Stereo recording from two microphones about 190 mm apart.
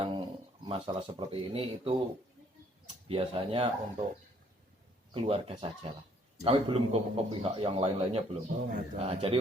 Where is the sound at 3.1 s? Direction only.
30° right (ahead or behind).